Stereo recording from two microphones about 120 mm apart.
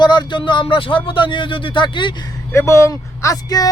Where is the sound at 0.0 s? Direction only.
40° left (ahead or behind).